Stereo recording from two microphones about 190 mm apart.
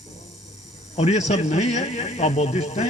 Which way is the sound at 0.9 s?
35° left (ahead or behind).